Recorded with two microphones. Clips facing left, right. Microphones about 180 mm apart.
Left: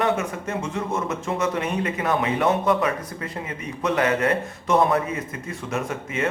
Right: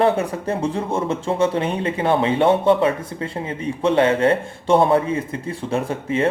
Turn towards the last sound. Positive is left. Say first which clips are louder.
# right 5 dB
turn(degrees=-30)  # may be behind; listen again after turning